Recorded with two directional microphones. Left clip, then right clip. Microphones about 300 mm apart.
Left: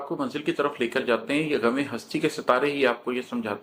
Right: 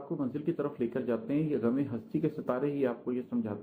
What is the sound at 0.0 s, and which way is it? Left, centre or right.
Speech, centre.